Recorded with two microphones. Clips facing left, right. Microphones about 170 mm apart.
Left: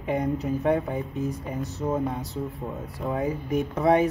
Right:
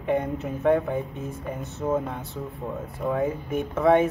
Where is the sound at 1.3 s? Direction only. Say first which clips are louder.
Left 2 dB; 35° left (ahead or behind).